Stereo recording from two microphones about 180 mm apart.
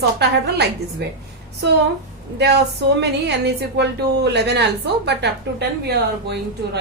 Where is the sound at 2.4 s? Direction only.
65° right (ahead or behind).